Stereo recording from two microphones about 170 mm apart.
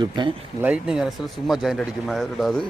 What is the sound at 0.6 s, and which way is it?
Speech, 5° right (ahead or behind).